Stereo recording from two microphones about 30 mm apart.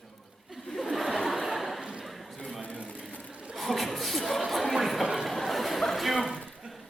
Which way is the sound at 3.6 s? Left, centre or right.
Centre.